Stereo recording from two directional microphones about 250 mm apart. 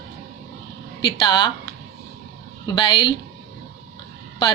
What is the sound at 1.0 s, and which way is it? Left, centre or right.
Speech, centre.